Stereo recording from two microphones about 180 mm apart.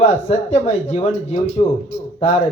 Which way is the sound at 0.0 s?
35° left (ahead or behind).